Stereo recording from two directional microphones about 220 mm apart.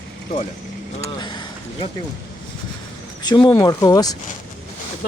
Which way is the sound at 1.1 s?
20° left (ahead or behind).